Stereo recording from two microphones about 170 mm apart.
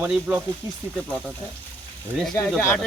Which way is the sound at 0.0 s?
5° right (ahead or behind).